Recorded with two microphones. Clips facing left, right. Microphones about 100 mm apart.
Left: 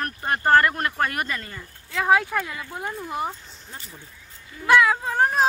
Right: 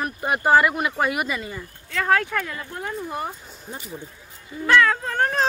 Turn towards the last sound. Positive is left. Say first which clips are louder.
# left 1 dB
turn(degrees=10)  # may be behind; listen again after turning